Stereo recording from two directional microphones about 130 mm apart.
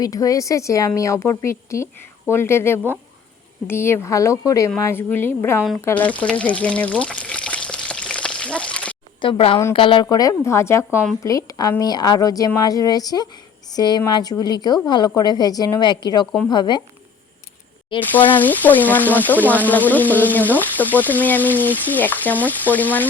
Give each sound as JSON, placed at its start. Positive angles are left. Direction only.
{"t": 0.0, "sound": "a woman's voice", "side_deg": 25}
{"t": 6.3, "sound": "pour", "side_deg": 10}
{"t": 9.2, "sound": "a woman's voice", "side_deg": 45}
{"t": 17.9, "sound": "a woman's voice", "side_deg": 40}
{"t": 18.3, "sound": "speech", "side_deg": 15}